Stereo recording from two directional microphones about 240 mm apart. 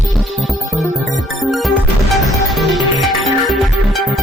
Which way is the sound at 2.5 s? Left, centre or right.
Centre.